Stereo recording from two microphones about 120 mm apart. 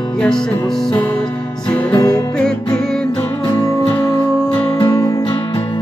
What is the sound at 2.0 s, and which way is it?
Music, 30° left (ahead or behind).